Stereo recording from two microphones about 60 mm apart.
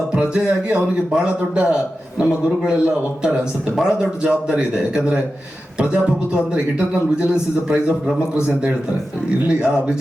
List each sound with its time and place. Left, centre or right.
0.1 s a man's voice: centre
5.8 s a man's voice: centre